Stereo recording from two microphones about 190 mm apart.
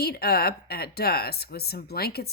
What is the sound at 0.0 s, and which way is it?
A woman's voice, 55° left (ahead or behind).